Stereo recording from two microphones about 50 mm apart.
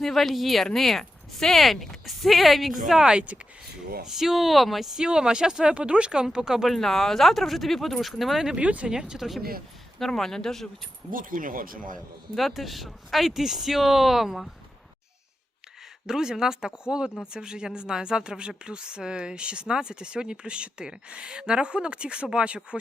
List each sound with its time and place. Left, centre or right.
0.0 s speech: centre
3.1 s speech: right
4.0 s speech: centre
5.0 s speech: centre
6.7 s speech: centre
8.6 s speech: right
8.9 s speech: centre
10.1 s speech: centre
11.9 s speech: centre
16.0 s speech: centre